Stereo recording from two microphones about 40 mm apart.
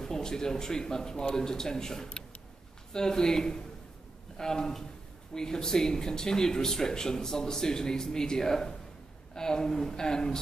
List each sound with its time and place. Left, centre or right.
0.0 s speech: centre